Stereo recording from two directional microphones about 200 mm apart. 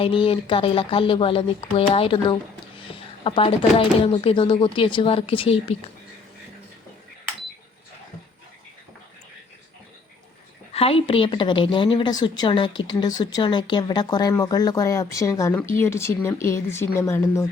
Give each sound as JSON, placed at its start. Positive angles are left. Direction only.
{"t": 0.0, "sound": "a woman's voice", "side_deg": 25}
{"t": 10.7, "sound": "a woman's voice", "side_deg": 30}